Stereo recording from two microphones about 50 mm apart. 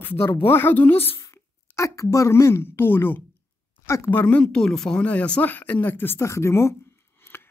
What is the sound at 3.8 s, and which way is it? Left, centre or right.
Speech, left.